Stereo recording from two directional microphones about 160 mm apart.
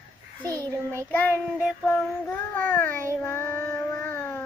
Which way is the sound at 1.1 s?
10° left (ahead or behind).